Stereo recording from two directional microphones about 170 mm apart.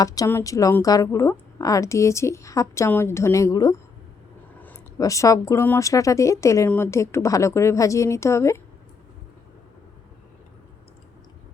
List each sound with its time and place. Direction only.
0.0 s a woman's voice: 20° left (ahead or behind)
4.9 s a woman's voice: 20° left (ahead or behind)